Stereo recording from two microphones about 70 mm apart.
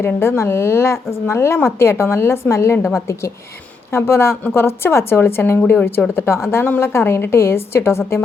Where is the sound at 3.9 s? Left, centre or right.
Left.